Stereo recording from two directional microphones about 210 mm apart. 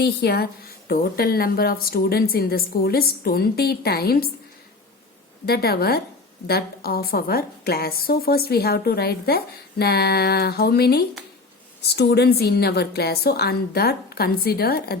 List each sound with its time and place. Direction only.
0.0 s a woman's voice: 50° left (ahead or behind)
5.5 s a woman's voice: 45° left (ahead or behind)